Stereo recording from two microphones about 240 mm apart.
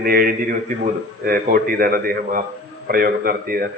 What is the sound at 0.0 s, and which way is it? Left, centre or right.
A man's voice, right.